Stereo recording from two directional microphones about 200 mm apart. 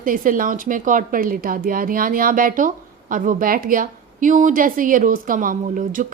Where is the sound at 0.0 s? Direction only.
45° right (ahead or behind).